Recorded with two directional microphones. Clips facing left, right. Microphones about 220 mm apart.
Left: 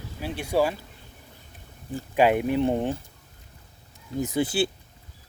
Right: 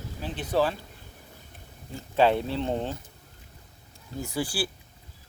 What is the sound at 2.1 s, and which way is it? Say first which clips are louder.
Speech: left 2 dB; 15° left (ahead or behind).